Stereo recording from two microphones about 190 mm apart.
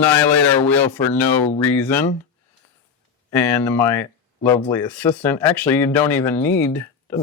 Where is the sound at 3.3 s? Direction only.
15° left (ahead or behind).